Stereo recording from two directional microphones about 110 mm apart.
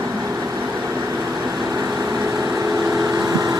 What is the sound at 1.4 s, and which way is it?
Vehicle, 35° right (ahead or behind).